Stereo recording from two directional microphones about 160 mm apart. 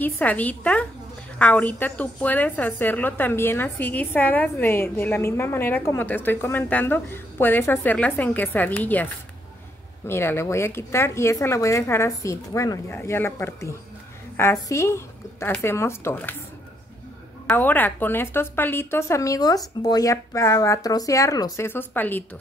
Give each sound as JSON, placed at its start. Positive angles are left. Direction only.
{"t": 0.0, "sound": "a woman's voice", "side_deg": 10}
{"t": 17.5, "sound": "a woman's voice", "side_deg": 10}